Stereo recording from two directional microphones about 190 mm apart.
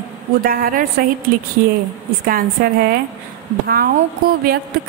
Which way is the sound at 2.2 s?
50° right (ahead or behind).